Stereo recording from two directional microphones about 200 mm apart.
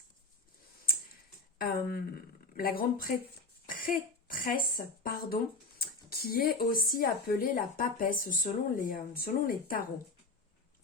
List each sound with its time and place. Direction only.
1.5 s speech: 45° left (ahead or behind)
3.7 s a sound: 45° left (ahead or behind)
5.0 s speech: 50° left (ahead or behind)